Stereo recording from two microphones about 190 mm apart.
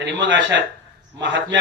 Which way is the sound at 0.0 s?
70° right (ahead or behind).